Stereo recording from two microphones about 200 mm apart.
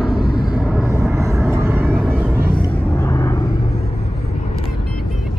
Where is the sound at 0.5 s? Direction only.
5° right (ahead or behind).